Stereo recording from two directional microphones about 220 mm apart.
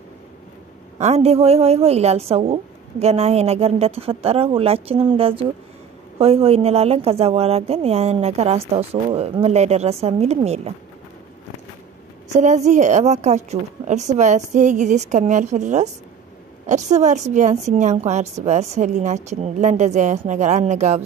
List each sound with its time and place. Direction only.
0.9 s a woman's voice: 30° right (ahead or behind)
12.3 s a woman's voice: 30° right (ahead or behind)